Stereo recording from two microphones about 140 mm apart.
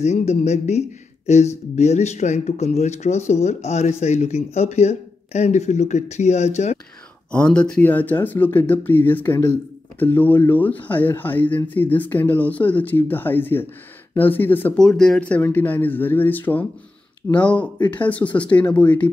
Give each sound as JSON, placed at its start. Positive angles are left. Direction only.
{"t": 0.0, "sound": "speech", "side_deg": 50}
{"t": 7.2, "sound": "speech", "side_deg": 5}